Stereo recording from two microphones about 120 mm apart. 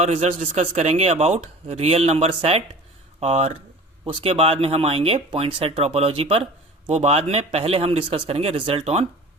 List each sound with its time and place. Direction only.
0.0 s speech: 65° right (ahead or behind)